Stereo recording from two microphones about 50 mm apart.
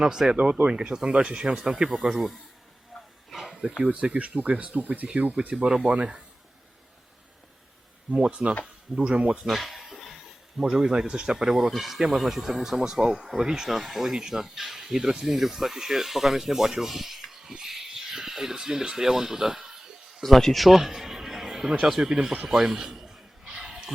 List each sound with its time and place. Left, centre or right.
0.0 s speech: centre
3.2 s a sound: centre
3.6 s speech: centre
5.6 s speech: centre
5.9 s speech: right
8.1 s speech: centre
9.5 s a sound: centre
10.6 s speech: centre
20.2 s a man's voice: centre
22.4 s a sound: centre